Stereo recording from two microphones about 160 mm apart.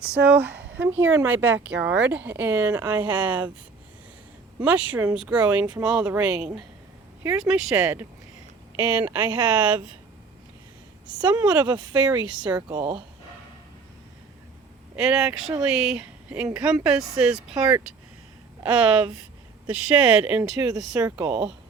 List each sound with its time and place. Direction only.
0.3 s speech: 10° right (ahead or behind)
4.6 s speech: 10° right (ahead or behind)
11.0 s a woman's voice: 5° right (ahead or behind)
11.6 s speech: 25° right (ahead or behind)
12.4 s speech: 5° right (ahead or behind)
12.6 s speech: 30° right (ahead or behind)
14.9 s speech: 5° right (ahead or behind)